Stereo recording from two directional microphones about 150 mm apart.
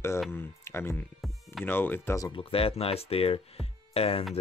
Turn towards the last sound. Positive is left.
turn(degrees=40)  # may be behind; listen again after turning